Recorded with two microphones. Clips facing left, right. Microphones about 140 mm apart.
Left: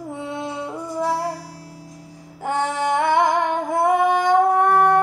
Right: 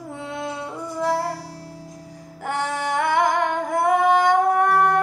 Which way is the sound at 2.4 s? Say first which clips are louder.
Left 3 dB; 20° left (ahead or behind).